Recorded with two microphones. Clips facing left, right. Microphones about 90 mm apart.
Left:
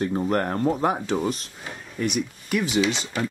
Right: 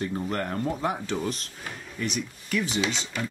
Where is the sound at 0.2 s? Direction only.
40° left (ahead or behind).